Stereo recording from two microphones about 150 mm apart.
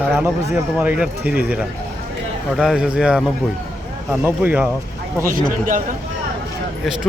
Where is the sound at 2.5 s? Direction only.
5° right (ahead or behind).